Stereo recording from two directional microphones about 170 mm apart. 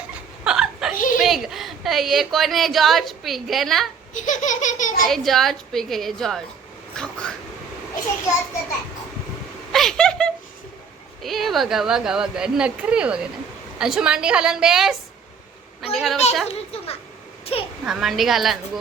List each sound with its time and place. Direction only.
0.4 s a sound: 5° right (ahead or behind)
0.9 s a sound: 55° left (ahead or behind)
1.2 s a woman's voice: centre (ahead or behind)
4.1 s speech: 50° left (ahead or behind)
5.0 s a woman's voice: centre (ahead or behind)
9.7 s a woman's voice: 5° left (ahead or behind)
16.5 s a child's voice: 35° left (ahead or behind)
17.8 s a woman's voice: centre (ahead or behind)